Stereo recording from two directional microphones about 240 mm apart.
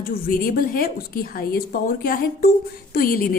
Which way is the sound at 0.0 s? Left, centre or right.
Left.